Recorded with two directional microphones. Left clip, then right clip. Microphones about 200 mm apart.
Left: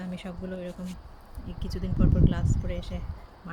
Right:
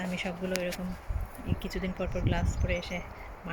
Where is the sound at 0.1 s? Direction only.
5° left (ahead or behind).